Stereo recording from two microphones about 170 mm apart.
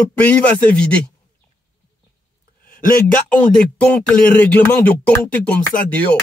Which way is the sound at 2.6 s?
60° left (ahead or behind).